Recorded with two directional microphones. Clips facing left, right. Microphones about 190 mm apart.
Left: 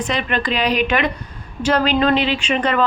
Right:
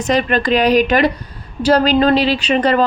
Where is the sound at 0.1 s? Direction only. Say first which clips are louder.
Right 9 dB; 40° right (ahead or behind).